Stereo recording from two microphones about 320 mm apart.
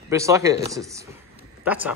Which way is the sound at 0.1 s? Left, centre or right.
Centre.